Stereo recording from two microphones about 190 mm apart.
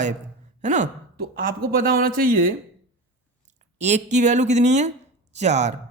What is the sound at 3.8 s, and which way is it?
A man's voice, 35° right (ahead or behind).